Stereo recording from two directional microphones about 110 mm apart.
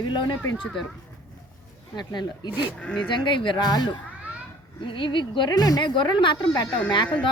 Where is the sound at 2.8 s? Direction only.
10° left (ahead or behind).